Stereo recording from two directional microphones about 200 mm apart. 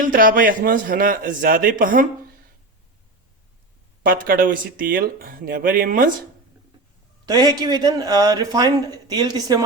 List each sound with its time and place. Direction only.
0.0 s a man's voice: 45° right (ahead or behind)
4.0 s a man's voice: 45° right (ahead or behind)
7.3 s a man's voice: 20° right (ahead or behind)